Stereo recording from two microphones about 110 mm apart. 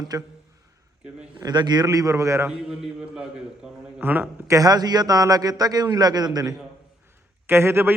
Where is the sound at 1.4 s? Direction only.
40° right (ahead or behind).